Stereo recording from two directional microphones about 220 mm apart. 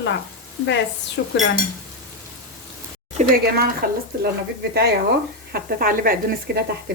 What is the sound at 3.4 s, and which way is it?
Speech, 45° right (ahead or behind).